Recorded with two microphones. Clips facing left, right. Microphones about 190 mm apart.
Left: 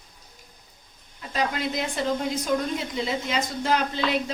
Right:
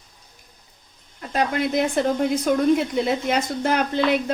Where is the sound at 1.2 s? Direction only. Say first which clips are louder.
Right 5 dB; 55° right (ahead or behind).